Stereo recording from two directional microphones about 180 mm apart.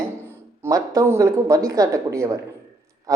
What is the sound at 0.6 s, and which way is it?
Speech, 15° right (ahead or behind).